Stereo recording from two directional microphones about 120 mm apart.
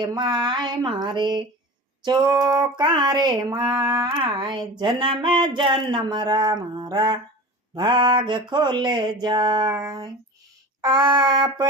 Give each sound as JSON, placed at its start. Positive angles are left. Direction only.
{"t": 0.0, "sound": "speech", "side_deg": -35}